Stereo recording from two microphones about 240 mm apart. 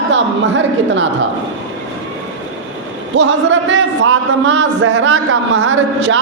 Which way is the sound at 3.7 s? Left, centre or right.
Right.